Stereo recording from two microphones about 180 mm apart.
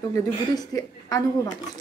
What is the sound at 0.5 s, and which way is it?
A woman's voice, 20° left (ahead or behind).